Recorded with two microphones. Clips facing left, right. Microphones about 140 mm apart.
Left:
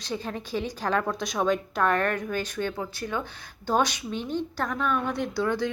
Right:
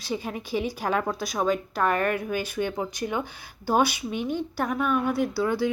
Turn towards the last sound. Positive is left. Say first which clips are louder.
# right 2 dB
turn(degrees=-10)  # may be behind; listen again after turning